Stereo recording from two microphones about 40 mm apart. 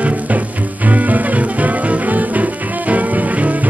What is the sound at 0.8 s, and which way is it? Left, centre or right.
Music, right.